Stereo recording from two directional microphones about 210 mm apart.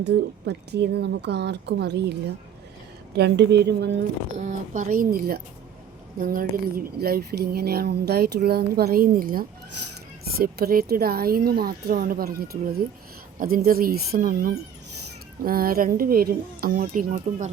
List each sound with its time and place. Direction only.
0.0 s speech: 55° right (ahead or behind)
4.4 s speech: 35° right (ahead or behind)